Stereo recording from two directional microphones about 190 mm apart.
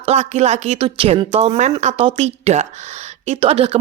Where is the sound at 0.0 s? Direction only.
35° right (ahead or behind).